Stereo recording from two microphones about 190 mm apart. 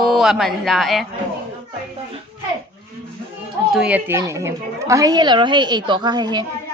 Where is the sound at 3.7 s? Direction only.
5° right (ahead or behind).